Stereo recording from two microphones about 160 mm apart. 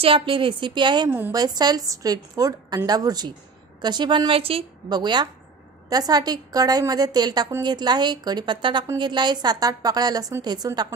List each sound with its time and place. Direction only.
0.0 s a woman's voice: 35° right (ahead or behind)